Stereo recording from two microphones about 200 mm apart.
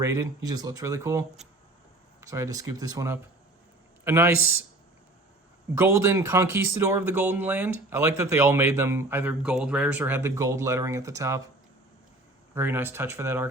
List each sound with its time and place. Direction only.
0.0 s speech: 15° right (ahead or behind)
2.2 s speech: 15° right (ahead or behind)
5.7 s speech: 15° right (ahead or behind)
12.5 s speech: 10° right (ahead or behind)